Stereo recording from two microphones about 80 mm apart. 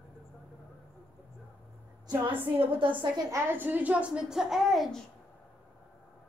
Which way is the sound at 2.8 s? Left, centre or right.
Right.